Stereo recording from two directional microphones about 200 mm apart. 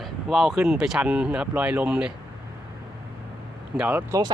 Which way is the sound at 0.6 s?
5° right (ahead or behind).